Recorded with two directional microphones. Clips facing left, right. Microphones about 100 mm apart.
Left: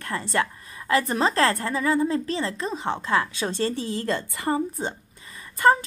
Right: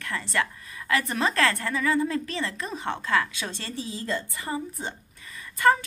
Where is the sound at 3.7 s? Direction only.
55° left (ahead or behind).